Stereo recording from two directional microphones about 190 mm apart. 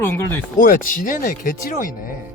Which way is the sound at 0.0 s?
10° left (ahead or behind).